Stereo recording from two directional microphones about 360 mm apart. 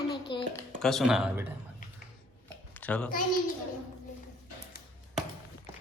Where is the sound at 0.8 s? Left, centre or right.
Centre.